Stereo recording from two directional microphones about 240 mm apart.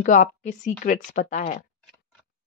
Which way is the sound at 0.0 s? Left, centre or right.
Left.